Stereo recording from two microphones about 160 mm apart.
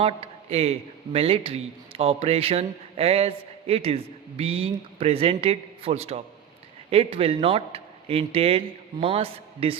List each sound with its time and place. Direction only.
0.0 s speech: 40° right (ahead or behind)